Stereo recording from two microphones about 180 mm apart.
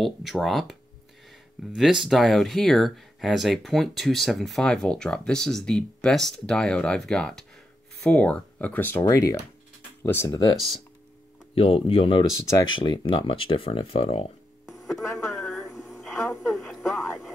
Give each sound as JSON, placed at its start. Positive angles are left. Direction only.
{"t": 0.0, "sound": "speech", "side_deg": 0}
{"t": 1.8, "sound": "speech", "side_deg": 0}
{"t": 11.5, "sound": "speech", "side_deg": 30}
{"t": 14.7, "sound": "radio", "side_deg": 0}
{"t": 15.2, "sound": "a sound", "side_deg": 0}
{"t": 16.5, "sound": "speech", "side_deg": 0}